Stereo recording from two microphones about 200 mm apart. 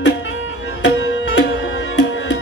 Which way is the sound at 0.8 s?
65° left (ahead or behind).